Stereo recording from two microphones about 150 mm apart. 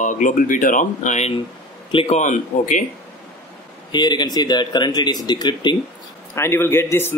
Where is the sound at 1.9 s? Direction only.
35° left (ahead or behind).